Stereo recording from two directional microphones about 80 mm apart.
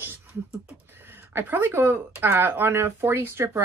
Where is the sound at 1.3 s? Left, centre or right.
Right.